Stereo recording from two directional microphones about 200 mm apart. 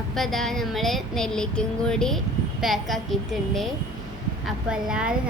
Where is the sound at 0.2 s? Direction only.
Centre (ahead or behind).